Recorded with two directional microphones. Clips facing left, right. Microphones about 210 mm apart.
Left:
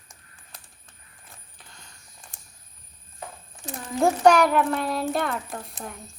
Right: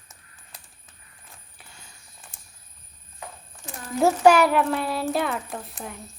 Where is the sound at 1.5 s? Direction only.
10° right (ahead or behind).